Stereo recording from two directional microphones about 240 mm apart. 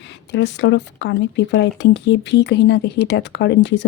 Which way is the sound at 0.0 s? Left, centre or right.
Left.